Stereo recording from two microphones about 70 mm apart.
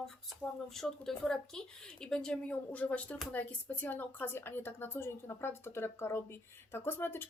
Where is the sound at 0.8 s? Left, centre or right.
Centre.